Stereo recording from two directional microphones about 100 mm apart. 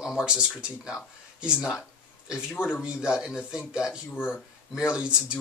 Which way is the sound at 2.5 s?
20° left (ahead or behind).